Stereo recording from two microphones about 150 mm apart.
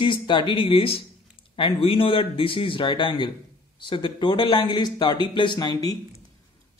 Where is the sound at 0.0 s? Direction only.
30° left (ahead or behind).